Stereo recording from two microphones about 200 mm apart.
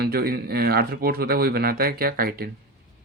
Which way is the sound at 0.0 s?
50° right (ahead or behind).